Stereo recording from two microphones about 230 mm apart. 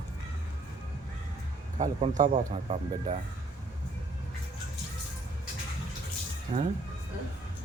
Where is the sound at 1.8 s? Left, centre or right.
Right.